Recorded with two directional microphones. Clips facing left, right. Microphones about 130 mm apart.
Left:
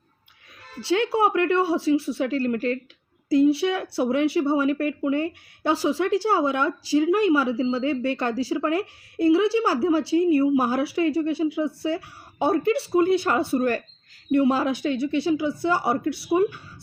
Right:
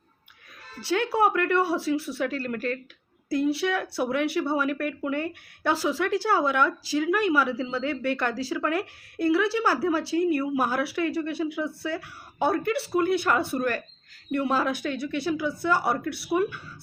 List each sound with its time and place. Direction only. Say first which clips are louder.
0.9 s speech: left 2 dB; 25° left (ahead or behind)